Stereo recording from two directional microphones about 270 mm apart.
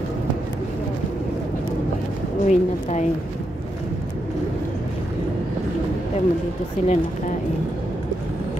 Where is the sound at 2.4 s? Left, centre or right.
Left.